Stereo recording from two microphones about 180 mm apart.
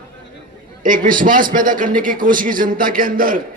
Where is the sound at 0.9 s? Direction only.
50° right (ahead or behind).